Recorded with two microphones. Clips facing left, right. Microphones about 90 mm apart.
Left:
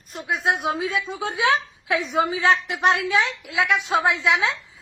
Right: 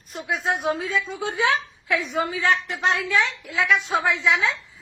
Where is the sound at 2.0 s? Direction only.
20° left (ahead or behind).